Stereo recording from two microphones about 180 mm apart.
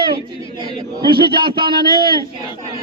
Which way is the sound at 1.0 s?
25° right (ahead or behind).